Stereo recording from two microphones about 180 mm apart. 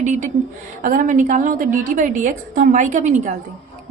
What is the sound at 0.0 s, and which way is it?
A woman's voice, 45° right (ahead or behind).